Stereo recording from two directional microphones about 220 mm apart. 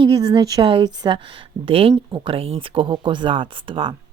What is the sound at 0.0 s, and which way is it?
Speech, 20° right (ahead or behind).